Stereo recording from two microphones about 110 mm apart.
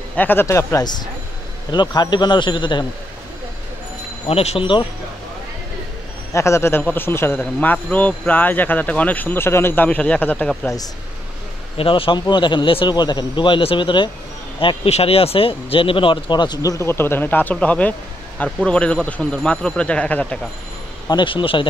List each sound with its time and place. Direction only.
0.1 s speech: 15° left (ahead or behind); by 2.9 s 45° left (ahead or behind)
4.3 s speech: 65° left (ahead or behind)
6.3 s speech: 25° left (ahead or behind)
11.7 s speech: 55° left (ahead or behind)
14.9 s speech: 65° left (ahead or behind); by 16.7 s 40° left (ahead or behind)
16.7 s speech: 20° left (ahead or behind)
21.1 s speech: 45° left (ahead or behind)